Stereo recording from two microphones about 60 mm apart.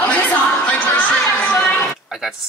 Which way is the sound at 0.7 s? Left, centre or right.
Left.